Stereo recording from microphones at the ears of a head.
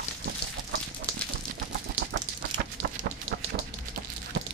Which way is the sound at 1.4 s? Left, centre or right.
Right.